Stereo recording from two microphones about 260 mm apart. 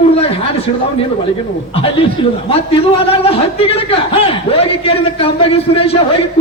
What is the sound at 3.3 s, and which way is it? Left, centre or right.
A man's voice, left.